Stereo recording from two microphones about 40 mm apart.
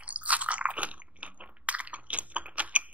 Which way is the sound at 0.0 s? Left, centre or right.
Right.